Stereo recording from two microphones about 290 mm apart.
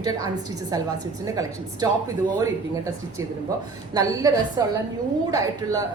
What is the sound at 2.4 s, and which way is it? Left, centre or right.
Speech, centre.